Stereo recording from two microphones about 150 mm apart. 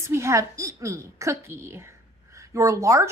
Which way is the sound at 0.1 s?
20° right (ahead or behind).